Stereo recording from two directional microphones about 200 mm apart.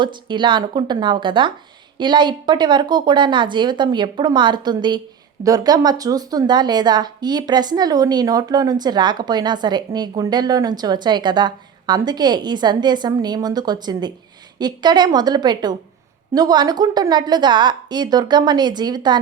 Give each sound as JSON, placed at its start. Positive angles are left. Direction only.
{"t": 0.0, "sound": "speech", "side_deg": -25}